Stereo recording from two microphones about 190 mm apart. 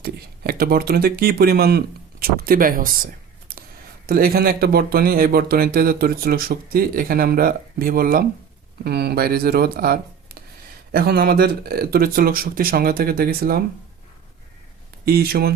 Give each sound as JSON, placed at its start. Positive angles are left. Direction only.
{"t": 0.0, "sound": "speech", "side_deg": -55}
{"t": 3.5, "sound": "a sound", "side_deg": -50}
{"t": 4.0, "sound": "speech", "side_deg": -50}
{"t": 15.0, "sound": "speech", "side_deg": -55}